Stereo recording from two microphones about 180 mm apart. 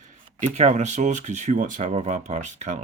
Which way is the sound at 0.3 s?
40° right (ahead or behind).